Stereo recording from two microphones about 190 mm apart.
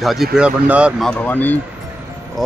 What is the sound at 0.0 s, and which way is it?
Speech, centre (ahead or behind).